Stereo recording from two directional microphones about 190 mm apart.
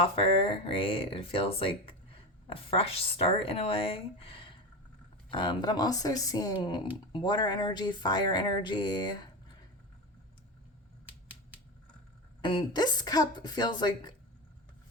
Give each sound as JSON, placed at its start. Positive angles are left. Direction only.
{"t": 0.0, "sound": "speech", "side_deg": 25}
{"t": 11.0, "sound": "typewriter", "side_deg": -10}
{"t": 12.4, "sound": "speech", "side_deg": 25}